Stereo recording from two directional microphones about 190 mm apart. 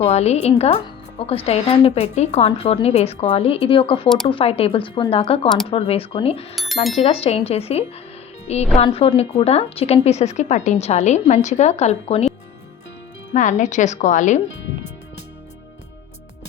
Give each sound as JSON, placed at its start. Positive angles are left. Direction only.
{"t": 0.0, "sound": "a woman's voice", "side_deg": 35}
{"t": 13.3, "sound": "a woman's voice", "side_deg": 40}